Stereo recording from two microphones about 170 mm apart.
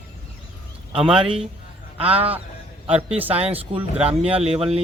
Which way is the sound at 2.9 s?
10° right (ahead or behind).